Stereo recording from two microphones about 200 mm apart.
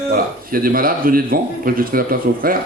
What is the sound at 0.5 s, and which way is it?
Speech, 45° right (ahead or behind).